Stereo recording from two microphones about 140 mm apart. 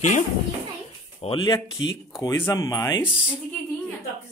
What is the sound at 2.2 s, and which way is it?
Speech, 20° left (ahead or behind).